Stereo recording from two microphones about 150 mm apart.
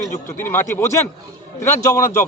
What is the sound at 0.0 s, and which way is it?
Speech, 15° left (ahead or behind).